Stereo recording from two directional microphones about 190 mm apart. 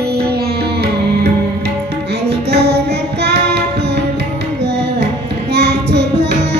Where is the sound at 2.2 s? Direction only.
60° right (ahead or behind).